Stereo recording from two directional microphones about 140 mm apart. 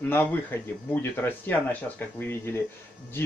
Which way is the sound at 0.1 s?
15° left (ahead or behind).